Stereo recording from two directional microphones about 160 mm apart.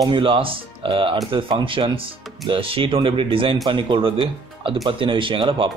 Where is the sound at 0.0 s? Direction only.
30° right (ahead or behind).